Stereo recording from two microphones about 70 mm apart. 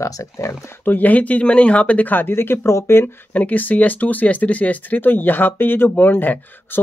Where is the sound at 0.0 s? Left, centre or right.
Left.